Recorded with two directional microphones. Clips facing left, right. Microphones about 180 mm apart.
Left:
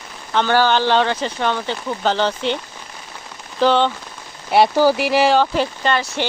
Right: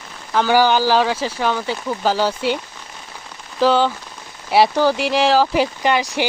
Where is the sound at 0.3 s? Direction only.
10° right (ahead or behind).